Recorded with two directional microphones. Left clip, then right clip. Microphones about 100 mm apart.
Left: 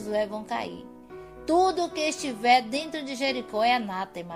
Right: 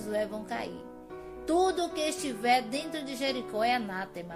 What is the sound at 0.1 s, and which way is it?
A woman's voice, 45° left (ahead or behind).